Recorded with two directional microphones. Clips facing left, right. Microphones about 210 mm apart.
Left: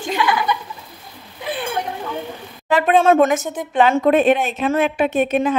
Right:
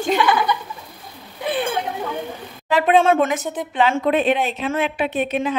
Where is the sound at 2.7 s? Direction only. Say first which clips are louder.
Left 1 dB; 40° left (ahead or behind).